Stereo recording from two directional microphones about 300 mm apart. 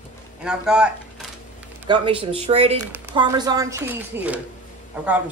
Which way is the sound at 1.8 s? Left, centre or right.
Centre.